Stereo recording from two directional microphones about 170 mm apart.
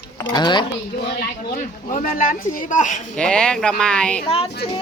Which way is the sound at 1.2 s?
50° left (ahead or behind).